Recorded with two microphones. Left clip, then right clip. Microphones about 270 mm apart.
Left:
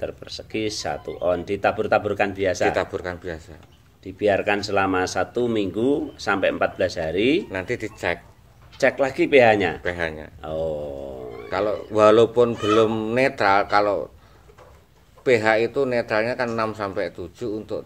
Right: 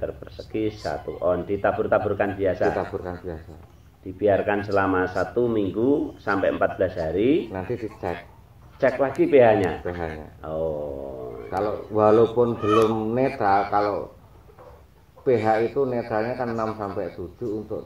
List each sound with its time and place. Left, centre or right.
0.0 s speech: left
3.0 s a man's voice: left
4.2 s speech: left
11.5 s a man's voice: left
15.3 s a man's voice: left